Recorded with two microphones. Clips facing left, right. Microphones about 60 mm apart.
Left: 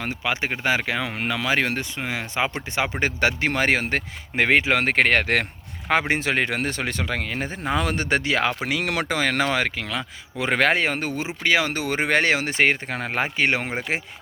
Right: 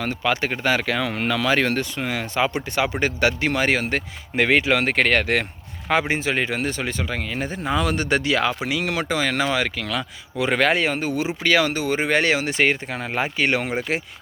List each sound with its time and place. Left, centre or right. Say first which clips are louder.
0.0 s speech: right 3 dB; centre; by 7.4 s left
7.4 s speech: right 3 dB; left
9.8 s speech: right 2 dB; left
11.2 s speech: right 2 dB; left
11.7 s speech: right 1 dB; left
12.2 s speech: even; left
13.2 s speech: right 1 dB; left